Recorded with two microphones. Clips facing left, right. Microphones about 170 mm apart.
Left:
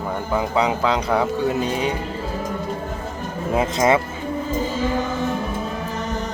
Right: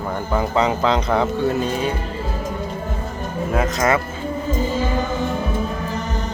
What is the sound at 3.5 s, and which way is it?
Speech, 25° left (ahead or behind).